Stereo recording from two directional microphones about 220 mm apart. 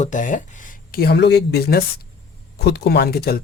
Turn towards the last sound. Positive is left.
turn(degrees=45)  # may be behind; listen again after turning